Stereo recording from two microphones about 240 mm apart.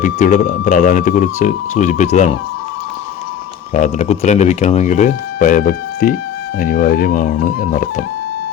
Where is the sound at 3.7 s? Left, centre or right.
Left.